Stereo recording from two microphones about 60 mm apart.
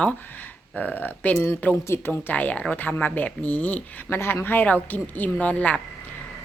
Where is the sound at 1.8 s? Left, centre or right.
Left.